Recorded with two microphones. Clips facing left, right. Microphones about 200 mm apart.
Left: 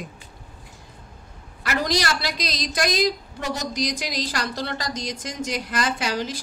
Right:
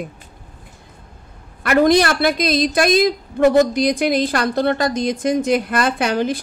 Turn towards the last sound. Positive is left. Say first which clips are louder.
# right 7 dB
turn(degrees=-55)  # may be behind; listen again after turning